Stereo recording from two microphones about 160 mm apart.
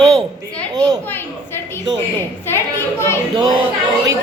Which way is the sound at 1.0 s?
15° left (ahead or behind).